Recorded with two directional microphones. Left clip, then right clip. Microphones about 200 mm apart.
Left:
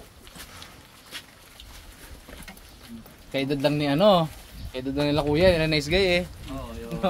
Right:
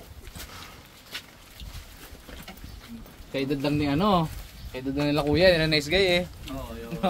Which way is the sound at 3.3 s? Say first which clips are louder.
Left 3 dB; 55° left (ahead or behind).